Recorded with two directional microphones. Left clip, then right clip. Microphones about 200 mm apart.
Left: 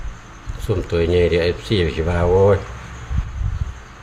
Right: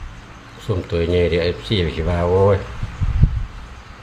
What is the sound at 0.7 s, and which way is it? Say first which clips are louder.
Speech: left 2 dB; 25° left (ahead or behind).